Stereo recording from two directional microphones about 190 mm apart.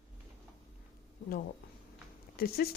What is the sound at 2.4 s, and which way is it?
Speech, 55° left (ahead or behind).